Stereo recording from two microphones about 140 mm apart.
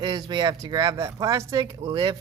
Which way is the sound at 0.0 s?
30° right (ahead or behind).